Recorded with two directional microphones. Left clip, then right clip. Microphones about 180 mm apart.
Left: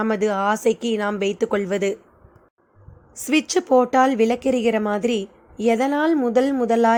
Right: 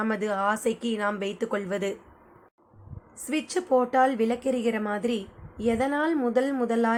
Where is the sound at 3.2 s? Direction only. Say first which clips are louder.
Left 8 dB; 45° left (ahead or behind).